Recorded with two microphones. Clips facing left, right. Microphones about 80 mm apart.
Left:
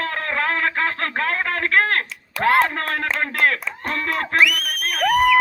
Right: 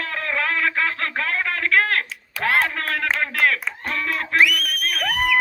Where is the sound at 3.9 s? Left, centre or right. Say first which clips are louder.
Left 2 dB; left.